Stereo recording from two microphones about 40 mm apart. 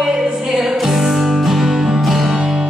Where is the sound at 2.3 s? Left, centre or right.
Centre.